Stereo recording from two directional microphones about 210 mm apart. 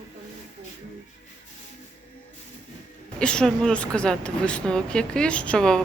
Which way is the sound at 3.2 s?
5° left (ahead or behind).